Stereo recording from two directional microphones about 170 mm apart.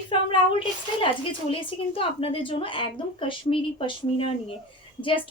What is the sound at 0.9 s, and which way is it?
Speech, 30° left (ahead or behind).